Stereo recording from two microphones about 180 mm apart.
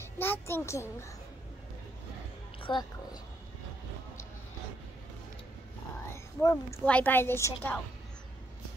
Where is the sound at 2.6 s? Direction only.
25° left (ahead or behind).